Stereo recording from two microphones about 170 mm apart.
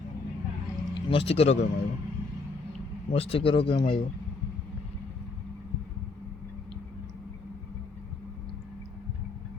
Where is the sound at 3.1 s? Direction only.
35° left (ahead or behind).